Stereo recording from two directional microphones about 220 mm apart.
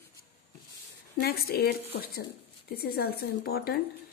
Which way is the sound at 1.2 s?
45° left (ahead or behind).